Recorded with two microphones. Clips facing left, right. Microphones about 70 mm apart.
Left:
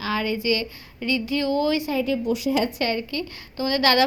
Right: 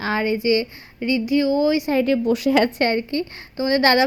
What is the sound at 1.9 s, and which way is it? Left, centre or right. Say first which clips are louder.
Speech: right 5 dB; right.